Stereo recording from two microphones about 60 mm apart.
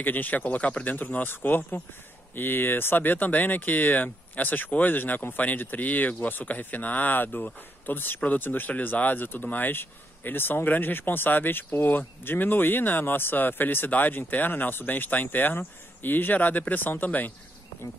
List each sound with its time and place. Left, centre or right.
0.0 s speech: left